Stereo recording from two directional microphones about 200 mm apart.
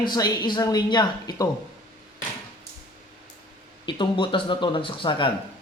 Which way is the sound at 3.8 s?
25° left (ahead or behind).